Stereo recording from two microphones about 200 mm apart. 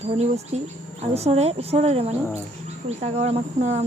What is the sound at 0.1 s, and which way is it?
Speech, 35° right (ahead or behind).